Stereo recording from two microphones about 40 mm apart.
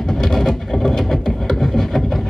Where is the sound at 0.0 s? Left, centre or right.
Centre.